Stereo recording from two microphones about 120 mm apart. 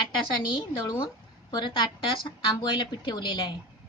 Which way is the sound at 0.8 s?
40° left (ahead or behind).